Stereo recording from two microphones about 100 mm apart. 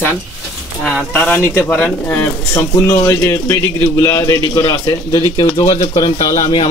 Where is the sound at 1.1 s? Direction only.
20° left (ahead or behind); by 5.2 s 45° left (ahead or behind).